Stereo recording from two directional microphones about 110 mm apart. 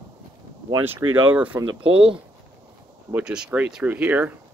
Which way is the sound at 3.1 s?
5° right (ahead or behind).